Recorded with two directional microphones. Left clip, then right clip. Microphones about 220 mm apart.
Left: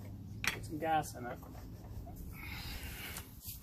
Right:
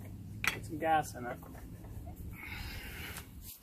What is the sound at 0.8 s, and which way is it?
Speech, 5° left (ahead or behind).